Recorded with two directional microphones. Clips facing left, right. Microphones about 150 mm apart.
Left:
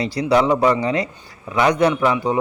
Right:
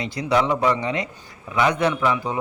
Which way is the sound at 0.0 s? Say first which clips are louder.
Left 4 dB; 35° left (ahead or behind).